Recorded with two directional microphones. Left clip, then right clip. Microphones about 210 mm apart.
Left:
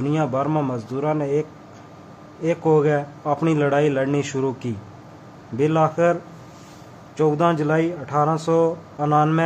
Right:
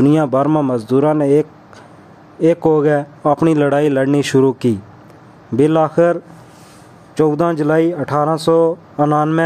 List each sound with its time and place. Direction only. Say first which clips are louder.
0.0 s a man's voice: right 9 dB; 50° right (ahead or behind)
7.2 s a man's voice: right 4 dB; 45° right (ahead or behind)